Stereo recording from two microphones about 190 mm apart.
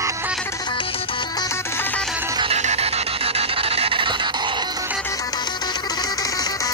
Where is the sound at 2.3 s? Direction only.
30° right (ahead or behind).